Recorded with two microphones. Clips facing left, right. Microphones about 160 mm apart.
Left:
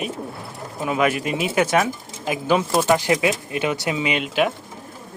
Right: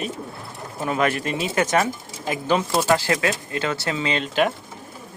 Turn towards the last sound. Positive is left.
turn(degrees=5)  # may be behind; listen again after turning